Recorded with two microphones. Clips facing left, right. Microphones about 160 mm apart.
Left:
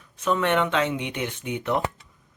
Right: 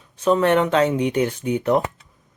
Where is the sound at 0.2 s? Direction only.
35° right (ahead or behind).